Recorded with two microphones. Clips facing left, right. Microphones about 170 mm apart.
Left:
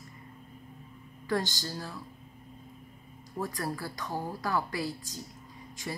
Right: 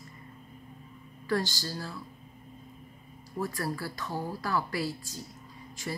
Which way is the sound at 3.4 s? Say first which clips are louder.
Right 1 dB; 20° left (ahead or behind).